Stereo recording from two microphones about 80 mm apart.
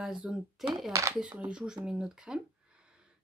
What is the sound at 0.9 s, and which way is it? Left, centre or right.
Speech, right.